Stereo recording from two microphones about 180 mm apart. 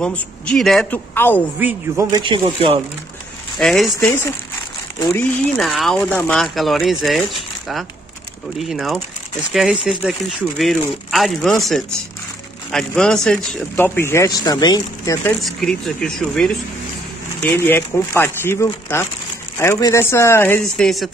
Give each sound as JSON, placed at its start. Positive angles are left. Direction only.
{"t": 0.0, "sound": "a man's voice", "side_deg": 5}
{"t": 1.6, "sound": "speech", "side_deg": -10}
{"t": 2.0, "sound": "speech", "side_deg": -25}
{"t": 3.5, "sound": "speech", "side_deg": 0}
{"t": 4.9, "sound": "speech", "side_deg": 15}
{"t": 5.6, "sound": "speech", "side_deg": 0}
{"t": 8.5, "sound": "speech", "side_deg": 0}
{"t": 12.7, "sound": "a man's voice", "side_deg": 5}
{"t": 15.4, "sound": "a man's voice", "side_deg": 0}